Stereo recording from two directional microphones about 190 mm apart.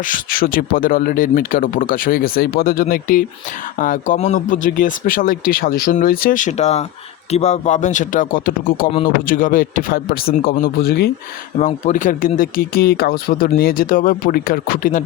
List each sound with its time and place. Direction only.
0.0 s a man's voice: 45° left (ahead or behind)
11.6 s speech: 40° left (ahead or behind)